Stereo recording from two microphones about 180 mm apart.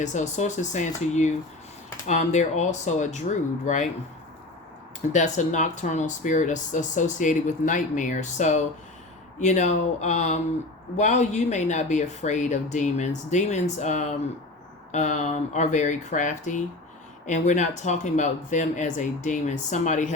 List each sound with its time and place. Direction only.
0.0 s speech: 40° left (ahead or behind)
5.1 s speech: 40° left (ahead or behind)